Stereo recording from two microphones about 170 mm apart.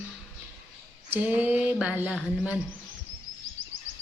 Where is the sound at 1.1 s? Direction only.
10° right (ahead or behind).